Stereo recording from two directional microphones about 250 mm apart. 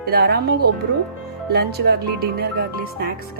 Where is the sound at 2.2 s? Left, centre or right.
Right.